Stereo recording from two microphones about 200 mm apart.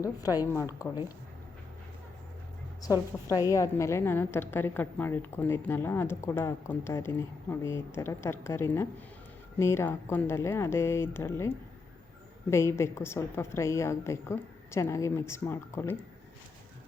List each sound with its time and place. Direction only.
0.0 s a woman's voice: 15° left (ahead or behind)
2.8 s a woman's voice: 15° left (ahead or behind)